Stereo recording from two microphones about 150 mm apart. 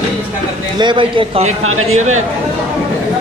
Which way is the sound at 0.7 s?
30° right (ahead or behind).